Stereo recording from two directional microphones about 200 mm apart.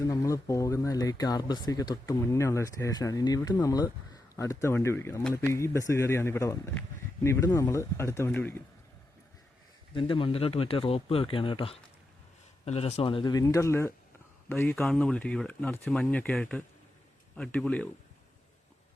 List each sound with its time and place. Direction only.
0.0 s speech: 15° left (ahead or behind)
9.9 s speech: 25° left (ahead or behind); by 17.8 s 5° left (ahead or behind)